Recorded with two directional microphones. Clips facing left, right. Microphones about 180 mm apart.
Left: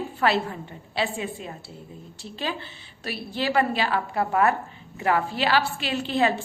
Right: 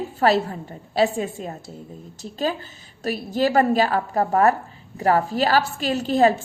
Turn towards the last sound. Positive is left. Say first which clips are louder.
# right 5 dB
turn(degrees=-45)  # may be behind; listen again after turning